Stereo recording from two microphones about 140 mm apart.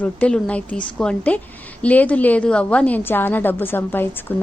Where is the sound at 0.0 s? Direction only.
10° left (ahead or behind).